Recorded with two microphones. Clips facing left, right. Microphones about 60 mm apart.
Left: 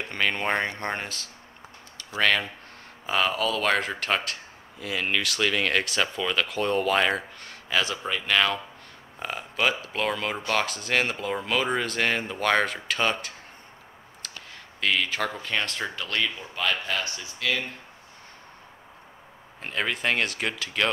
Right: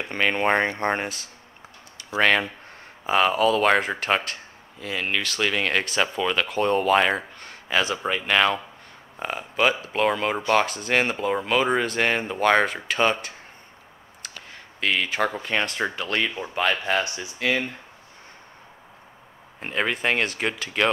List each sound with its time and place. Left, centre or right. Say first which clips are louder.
0.0 s speech: right 4 dB; centre
4.2 s speech: right 1 dB; centre
7.9 s speech: right 3 dB; centre
14.2 s clicking: right 2 dB; centre
14.8 s speech: right 2 dB; centre
19.6 s speech: right 3 dB; centre